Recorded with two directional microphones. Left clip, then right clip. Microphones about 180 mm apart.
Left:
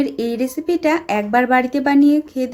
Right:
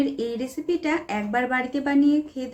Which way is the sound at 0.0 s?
45° left (ahead or behind).